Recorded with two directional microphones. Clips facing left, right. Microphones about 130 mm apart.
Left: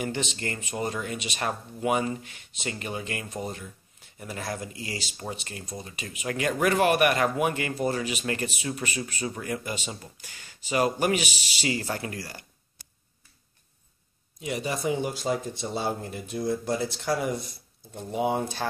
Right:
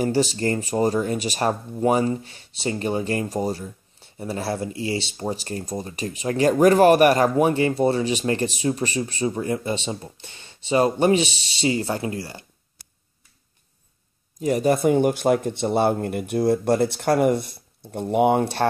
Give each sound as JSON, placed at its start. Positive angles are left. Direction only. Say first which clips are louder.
{"t": 0.0, "sound": "speech", "louder": "right 10 dB", "side_deg": -35}
{"t": 14.4, "sound": "speech", "louder": "right 10 dB", "side_deg": -45}